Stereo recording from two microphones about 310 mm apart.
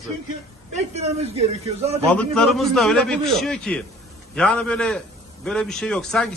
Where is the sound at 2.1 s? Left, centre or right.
Centre.